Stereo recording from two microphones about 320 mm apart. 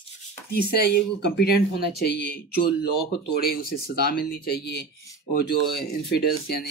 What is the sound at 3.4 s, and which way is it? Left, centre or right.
Speech, left.